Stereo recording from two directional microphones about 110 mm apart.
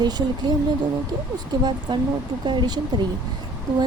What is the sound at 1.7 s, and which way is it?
Speech, 45° right (ahead or behind).